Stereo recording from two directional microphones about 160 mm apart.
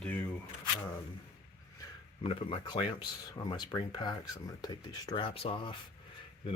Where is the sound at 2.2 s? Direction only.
35° left (ahead or behind).